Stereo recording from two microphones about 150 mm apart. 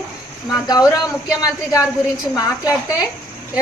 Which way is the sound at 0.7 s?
25° left (ahead or behind).